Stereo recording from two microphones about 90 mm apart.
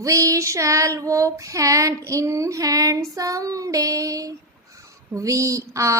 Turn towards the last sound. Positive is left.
turn(degrees=-35)  # may be behind; listen again after turning